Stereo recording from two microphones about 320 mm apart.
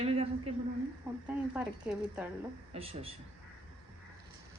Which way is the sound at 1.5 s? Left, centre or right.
Centre.